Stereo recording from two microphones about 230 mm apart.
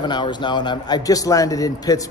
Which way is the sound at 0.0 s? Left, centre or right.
Centre.